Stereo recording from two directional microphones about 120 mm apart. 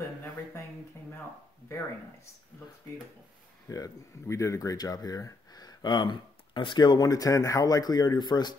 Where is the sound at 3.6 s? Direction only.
30° left (ahead or behind).